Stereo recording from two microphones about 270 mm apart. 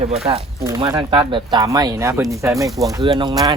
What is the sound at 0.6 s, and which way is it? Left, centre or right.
Speech, centre.